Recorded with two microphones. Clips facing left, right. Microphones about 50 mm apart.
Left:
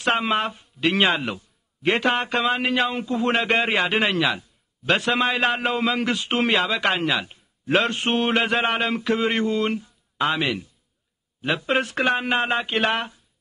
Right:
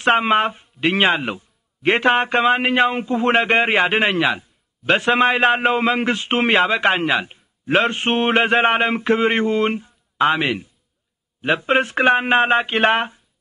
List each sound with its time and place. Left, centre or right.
0.0 s a man's voice: right